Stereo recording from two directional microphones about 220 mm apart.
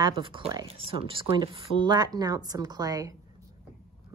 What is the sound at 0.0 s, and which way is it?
Speech, 20° right (ahead or behind).